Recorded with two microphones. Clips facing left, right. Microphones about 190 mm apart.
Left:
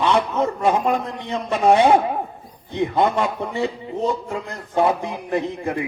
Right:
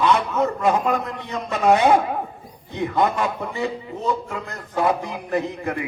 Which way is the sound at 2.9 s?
30° left (ahead or behind).